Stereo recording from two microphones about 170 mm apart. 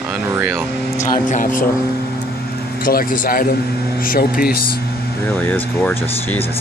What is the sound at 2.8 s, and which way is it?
Speech, 55° left (ahead or behind).